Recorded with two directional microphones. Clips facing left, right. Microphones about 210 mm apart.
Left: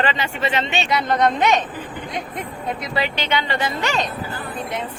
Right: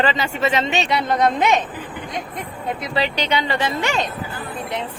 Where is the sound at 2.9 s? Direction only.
35° right (ahead or behind).